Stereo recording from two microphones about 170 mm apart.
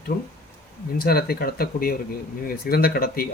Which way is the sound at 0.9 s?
65° left (ahead or behind).